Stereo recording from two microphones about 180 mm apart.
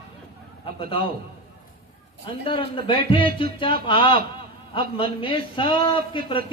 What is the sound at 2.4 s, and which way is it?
A man's voice, 30° left (ahead or behind).